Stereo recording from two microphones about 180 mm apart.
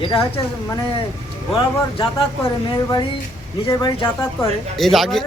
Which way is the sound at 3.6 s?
20° left (ahead or behind).